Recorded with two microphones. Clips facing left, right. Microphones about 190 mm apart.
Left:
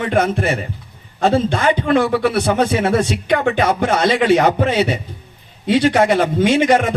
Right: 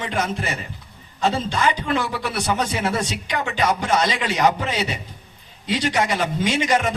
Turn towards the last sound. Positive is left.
turn(degrees=55)  # may be behind; listen again after turning